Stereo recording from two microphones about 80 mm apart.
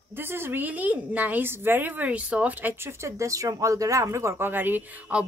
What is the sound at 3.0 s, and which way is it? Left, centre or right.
A woman's voice, right.